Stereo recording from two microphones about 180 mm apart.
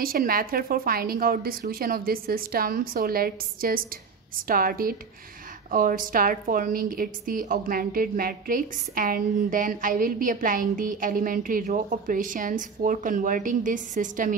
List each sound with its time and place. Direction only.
0.0 s a woman's voice: 55° right (ahead or behind)